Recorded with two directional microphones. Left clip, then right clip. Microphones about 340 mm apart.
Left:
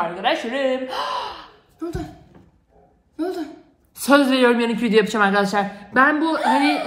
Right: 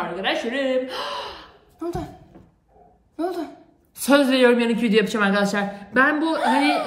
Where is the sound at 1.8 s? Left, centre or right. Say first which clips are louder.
Right 1 dB; right.